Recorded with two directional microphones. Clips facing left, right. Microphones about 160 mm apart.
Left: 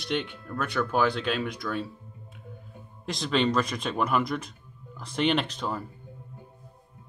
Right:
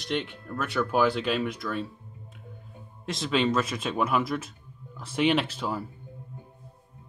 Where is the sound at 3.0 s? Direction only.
Centre (ahead or behind).